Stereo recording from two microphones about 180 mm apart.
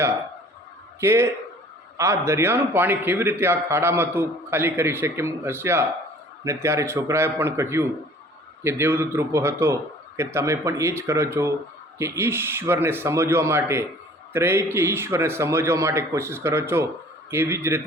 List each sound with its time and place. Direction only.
1.0 s a man's voice: 15° right (ahead or behind)